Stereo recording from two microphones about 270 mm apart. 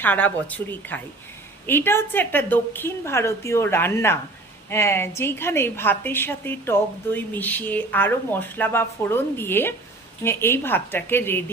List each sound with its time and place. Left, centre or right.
0.0 s a woman's voice: centre